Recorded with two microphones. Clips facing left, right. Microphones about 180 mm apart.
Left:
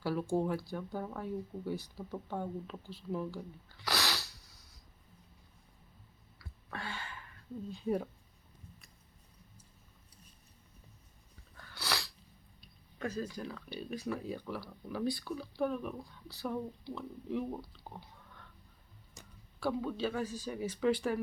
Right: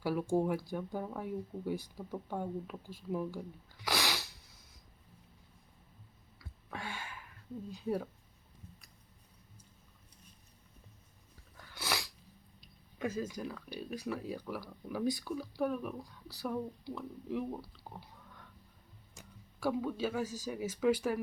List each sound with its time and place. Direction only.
0.0 s speech: 10° right (ahead or behind)
6.7 s a sound: 15° right (ahead or behind)
7.8 s speech: 5° right (ahead or behind)
11.5 s sneeze: 15° right (ahead or behind)
13.0 s speech: 15° right (ahead or behind)
19.1 s a sound: 10° right (ahead or behind)
20.5 s speech: 5° right (ahead or behind)